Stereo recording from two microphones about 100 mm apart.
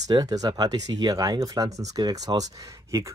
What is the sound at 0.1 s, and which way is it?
Speech, 40° right (ahead or behind).